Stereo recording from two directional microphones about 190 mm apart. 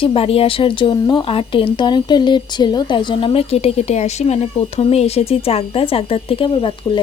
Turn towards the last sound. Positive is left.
turn(degrees=25)  # may be behind; listen again after turning